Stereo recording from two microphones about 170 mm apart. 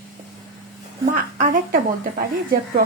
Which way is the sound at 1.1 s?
55° right (ahead or behind).